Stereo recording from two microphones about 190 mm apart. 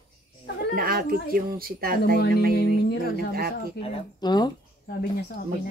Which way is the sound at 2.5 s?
55° left (ahead or behind).